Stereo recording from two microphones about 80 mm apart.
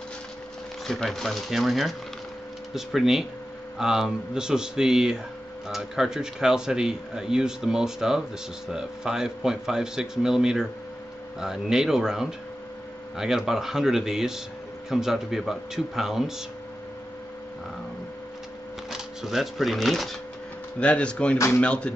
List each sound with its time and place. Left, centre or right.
0.8 s speech: centre
18.9 s speech: centre
20.8 s speech: centre